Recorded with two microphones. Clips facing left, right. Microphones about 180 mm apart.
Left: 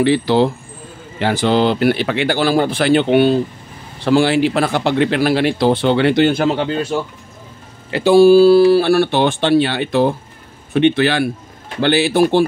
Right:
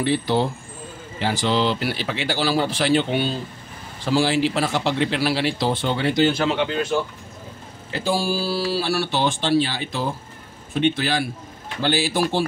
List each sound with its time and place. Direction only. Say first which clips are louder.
0.0 s speech: left 7 dB; 85° left
1.2 s speech: left 6 dB; 55° left (ahead or behind); by 7.0 s 35° left (ahead or behind)
7.9 s speech: left 15 dB; 70° left (ahead or behind)